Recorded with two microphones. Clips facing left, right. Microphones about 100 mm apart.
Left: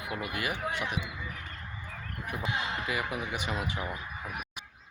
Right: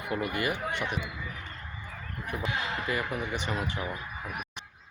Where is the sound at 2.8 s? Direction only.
10° left (ahead or behind).